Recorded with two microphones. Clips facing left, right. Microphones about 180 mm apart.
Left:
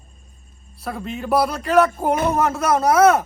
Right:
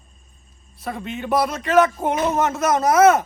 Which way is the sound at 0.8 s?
Centre (ahead or behind).